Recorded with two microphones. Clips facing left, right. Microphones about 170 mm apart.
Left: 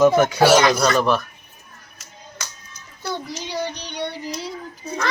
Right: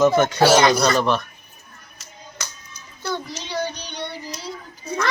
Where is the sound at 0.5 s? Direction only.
30° right (ahead or behind).